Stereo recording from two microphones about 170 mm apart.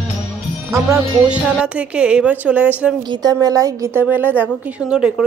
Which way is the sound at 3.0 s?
25° right (ahead or behind).